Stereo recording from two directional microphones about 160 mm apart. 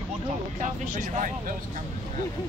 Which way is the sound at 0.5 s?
55° right (ahead or behind).